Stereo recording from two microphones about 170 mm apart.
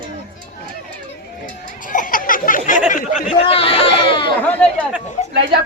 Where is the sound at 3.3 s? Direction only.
35° left (ahead or behind).